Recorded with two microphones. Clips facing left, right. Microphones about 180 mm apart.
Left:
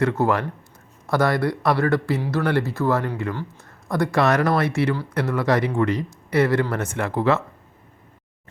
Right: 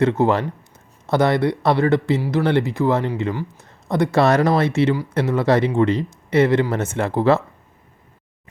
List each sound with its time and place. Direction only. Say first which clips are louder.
0.0 s speech: right 3 dB; 20° right (ahead or behind)